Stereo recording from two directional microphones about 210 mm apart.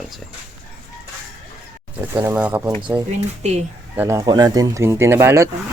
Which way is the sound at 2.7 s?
20° right (ahead or behind).